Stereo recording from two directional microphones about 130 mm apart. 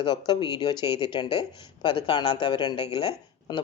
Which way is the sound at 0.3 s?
35° left (ahead or behind).